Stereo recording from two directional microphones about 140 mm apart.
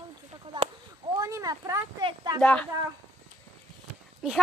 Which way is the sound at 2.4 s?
10° left (ahead or behind).